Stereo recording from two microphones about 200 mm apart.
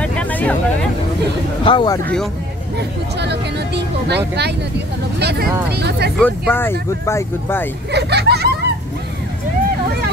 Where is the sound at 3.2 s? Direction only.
55° right (ahead or behind).